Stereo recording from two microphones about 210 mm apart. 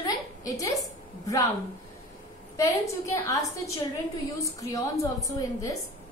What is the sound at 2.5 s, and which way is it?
A woman's voice, 15° left (ahead or behind).